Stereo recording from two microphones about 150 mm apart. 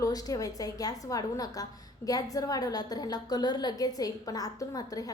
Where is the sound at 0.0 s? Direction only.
25° left (ahead or behind).